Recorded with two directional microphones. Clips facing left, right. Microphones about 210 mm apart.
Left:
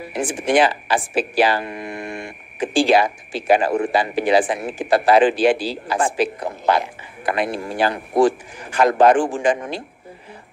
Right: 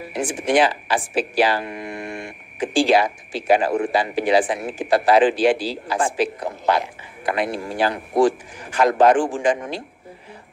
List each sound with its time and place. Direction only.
0.3 s speech: 55° left (ahead or behind)
2.7 s speech: 55° left (ahead or behind)